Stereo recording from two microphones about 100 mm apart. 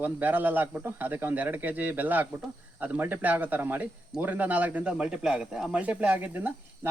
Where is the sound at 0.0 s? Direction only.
20° right (ahead or behind).